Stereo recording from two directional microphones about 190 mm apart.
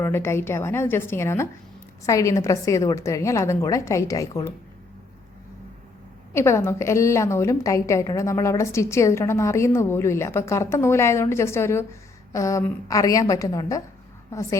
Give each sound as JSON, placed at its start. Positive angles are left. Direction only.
{"t": 0.0, "sound": "a woman's voice", "side_deg": 15}
{"t": 6.3, "sound": "a woman's voice", "side_deg": 15}